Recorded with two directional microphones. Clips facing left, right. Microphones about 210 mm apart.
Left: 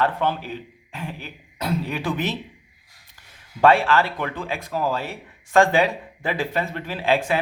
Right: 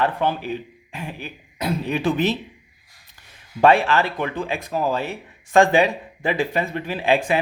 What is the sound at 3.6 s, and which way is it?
Speech, 20° right (ahead or behind).